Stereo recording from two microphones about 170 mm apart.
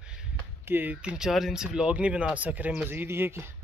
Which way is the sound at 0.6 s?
10° right (ahead or behind).